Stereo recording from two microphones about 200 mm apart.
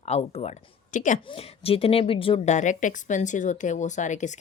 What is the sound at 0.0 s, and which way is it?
A woman's voice, 30° left (ahead or behind).